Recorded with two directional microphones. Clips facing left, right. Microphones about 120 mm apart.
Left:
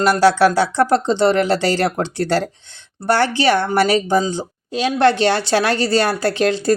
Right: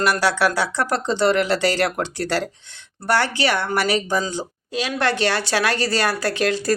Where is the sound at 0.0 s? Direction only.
30° left (ahead or behind).